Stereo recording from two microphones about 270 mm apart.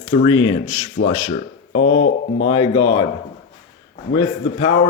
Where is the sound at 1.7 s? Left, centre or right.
Left.